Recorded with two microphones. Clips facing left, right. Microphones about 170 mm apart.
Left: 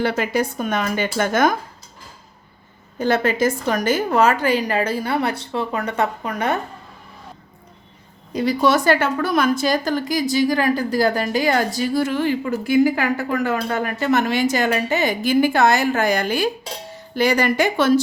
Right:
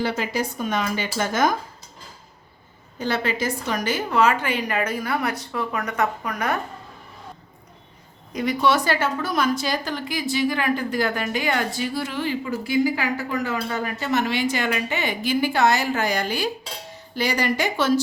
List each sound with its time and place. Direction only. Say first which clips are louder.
0.0 s speech: left 4 dB; 60° left (ahead or behind)
3.0 s a woman's voice: left 6 dB; 50° left (ahead or behind); by 6.6 s 25° left (ahead or behind)
8.3 s a woman's voice: left 3 dB; 30° left (ahead or behind); by 18.0 s 55° left (ahead or behind)